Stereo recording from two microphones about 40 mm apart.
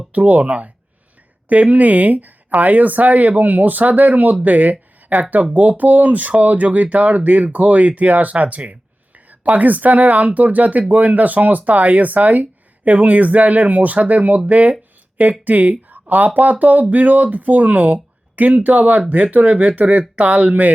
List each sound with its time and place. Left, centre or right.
0.1 s speech: right